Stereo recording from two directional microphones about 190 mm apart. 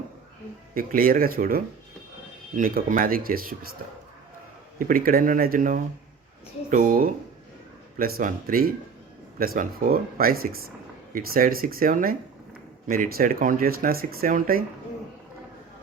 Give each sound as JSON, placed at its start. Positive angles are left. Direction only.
{"t": 0.7, "sound": "speech", "side_deg": -50}
{"t": 4.8, "sound": "speech", "side_deg": -50}